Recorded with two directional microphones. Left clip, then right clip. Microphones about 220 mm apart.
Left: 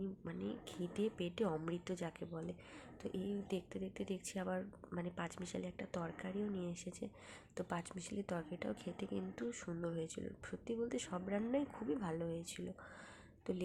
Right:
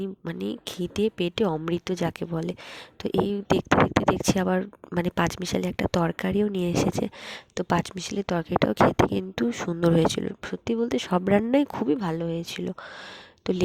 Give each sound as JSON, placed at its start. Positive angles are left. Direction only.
{"t": 0.3, "sound": "speech", "side_deg": -40}